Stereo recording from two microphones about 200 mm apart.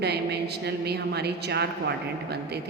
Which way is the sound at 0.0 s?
55° right (ahead or behind).